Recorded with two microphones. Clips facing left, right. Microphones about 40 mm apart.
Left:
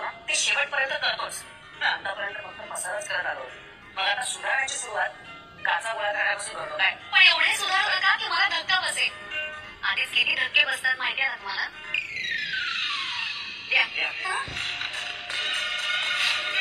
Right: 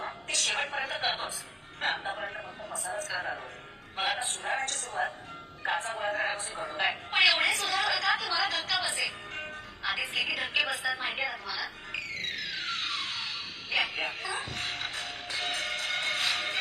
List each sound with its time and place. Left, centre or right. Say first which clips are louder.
0.0 s a woman's voice: left 5 dB; left
2.7 s a woman's voice: left 5 dB; left
6.1 s music: left 5 dB; left